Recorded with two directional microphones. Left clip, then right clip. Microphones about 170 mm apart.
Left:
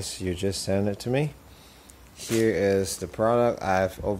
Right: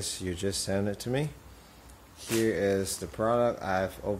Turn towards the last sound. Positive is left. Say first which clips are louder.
# left 5 dB
turn(degrees=35)  # may be behind; listen again after turning